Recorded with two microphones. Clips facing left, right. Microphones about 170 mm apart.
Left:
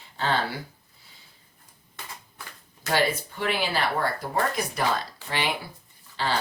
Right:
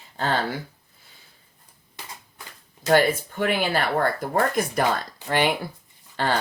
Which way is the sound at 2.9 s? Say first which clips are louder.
Right 6 dB; 50° right (ahead or behind).